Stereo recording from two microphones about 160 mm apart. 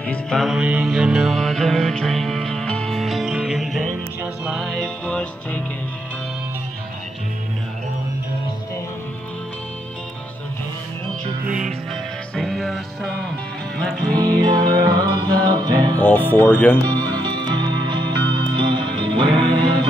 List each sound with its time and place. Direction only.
0.0 s music: 5° left (ahead or behind)
11.4 s music: 55° right (ahead or behind)
12.4 s music: centre (ahead or behind)
14.1 s music: 25° right (ahead or behind)
16.0 s speech: 10° left (ahead or behind)
16.8 s music: 30° right (ahead or behind)